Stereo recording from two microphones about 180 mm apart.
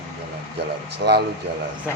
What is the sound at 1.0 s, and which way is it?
Speech, 80° right.